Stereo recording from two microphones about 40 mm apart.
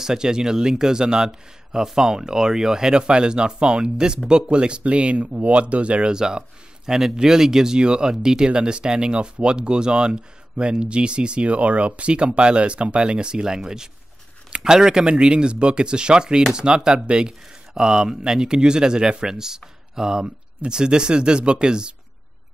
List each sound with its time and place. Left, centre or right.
0.0 s a man's voice: centre
6.1 s a man's voice: centre